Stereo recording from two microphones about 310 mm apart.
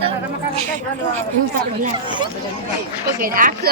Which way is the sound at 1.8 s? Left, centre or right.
Centre.